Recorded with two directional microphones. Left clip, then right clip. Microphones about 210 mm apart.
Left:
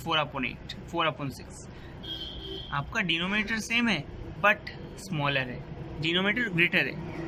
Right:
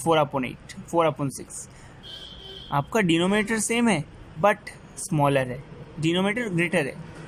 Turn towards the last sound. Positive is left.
turn(degrees=-25)  # may be behind; listen again after turning